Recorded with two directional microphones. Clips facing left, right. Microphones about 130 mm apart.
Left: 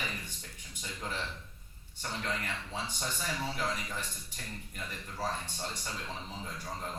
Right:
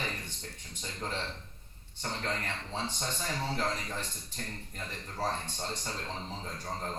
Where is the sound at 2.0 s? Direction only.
35° right (ahead or behind).